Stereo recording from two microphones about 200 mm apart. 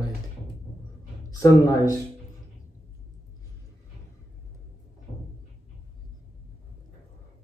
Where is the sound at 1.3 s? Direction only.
20° left (ahead or behind).